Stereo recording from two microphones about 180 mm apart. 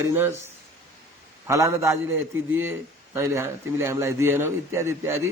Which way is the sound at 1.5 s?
15° right (ahead or behind).